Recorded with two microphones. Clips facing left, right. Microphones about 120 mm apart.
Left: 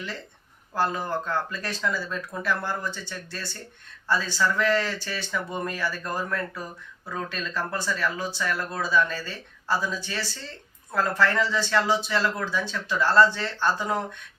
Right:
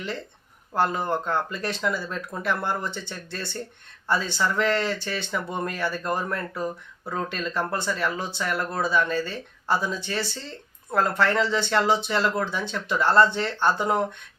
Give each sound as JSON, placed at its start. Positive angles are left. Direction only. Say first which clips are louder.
{"t": 0.7, "sound": "speech", "louder": "right 2 dB", "side_deg": -20}